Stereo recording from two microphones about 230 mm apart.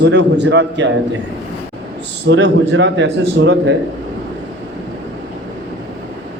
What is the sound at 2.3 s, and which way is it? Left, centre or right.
A man's voice, right.